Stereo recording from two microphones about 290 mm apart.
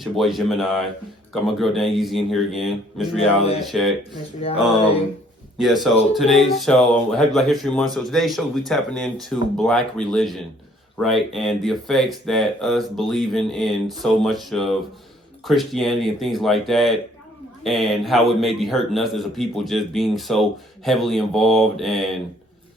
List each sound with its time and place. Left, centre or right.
0.0 s a man's voice: centre
4.4 s speech: centre
5.5 s a man's voice: centre